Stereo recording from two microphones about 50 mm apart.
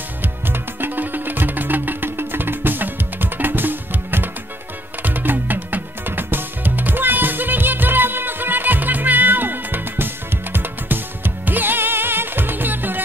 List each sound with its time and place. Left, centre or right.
0.2 s music: right